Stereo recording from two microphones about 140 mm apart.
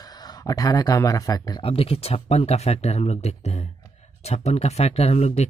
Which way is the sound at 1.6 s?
40° left (ahead or behind).